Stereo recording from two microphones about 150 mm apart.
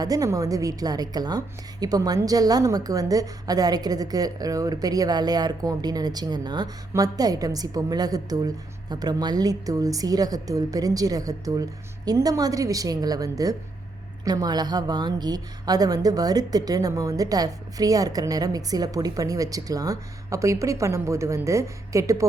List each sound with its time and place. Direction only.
0.0 s a woman's voice: 25° right (ahead or behind)